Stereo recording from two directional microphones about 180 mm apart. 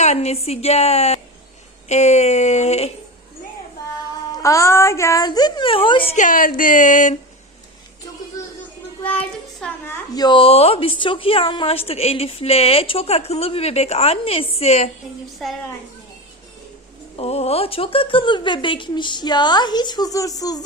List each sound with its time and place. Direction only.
0.0 s a woman's voice: 40° left (ahead or behind)
4.3 s a woman's voice: 15° left (ahead or behind)
6.1 s speech: 50° left (ahead or behind)
9.0 s a child's voice: 5° left (ahead or behind)
10.2 s a woman's voice: 30° left (ahead or behind)
15.4 s a woman's voice: centre (ahead or behind)
17.2 s a woman's voice: 35° left (ahead or behind)